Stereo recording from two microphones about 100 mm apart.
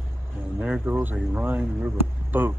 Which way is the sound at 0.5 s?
10° right (ahead or behind).